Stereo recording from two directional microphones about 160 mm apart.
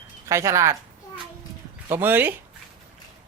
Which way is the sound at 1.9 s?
10° right (ahead or behind).